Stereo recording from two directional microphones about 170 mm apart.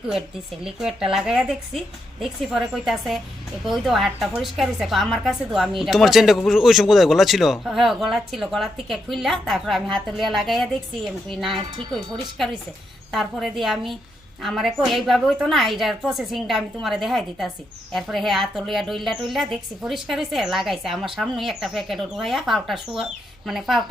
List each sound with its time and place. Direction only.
0.1 s a woman's voice: 5° right (ahead or behind)
11.5 s speech: 30° right (ahead or behind)
13.1 s a woman's voice: centre (ahead or behind)